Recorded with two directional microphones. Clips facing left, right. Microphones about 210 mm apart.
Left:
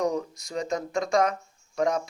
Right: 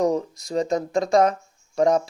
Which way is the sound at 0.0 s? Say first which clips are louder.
Right 5 dB; 35° right (ahead or behind).